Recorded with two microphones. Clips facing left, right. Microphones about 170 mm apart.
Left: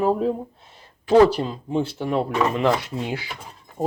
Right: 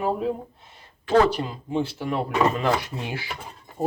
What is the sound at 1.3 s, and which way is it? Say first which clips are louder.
Speech: left 2 dB; 30° left (ahead or behind).